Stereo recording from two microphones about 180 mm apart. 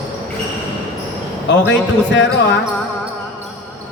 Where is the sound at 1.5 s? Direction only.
85° left.